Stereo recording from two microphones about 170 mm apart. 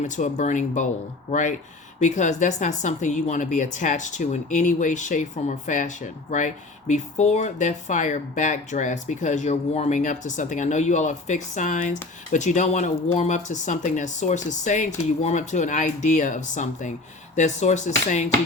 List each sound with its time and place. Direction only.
0.0 s speech: 45° left (ahead or behind)